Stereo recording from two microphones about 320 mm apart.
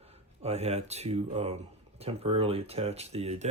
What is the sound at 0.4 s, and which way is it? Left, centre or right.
Speech, centre.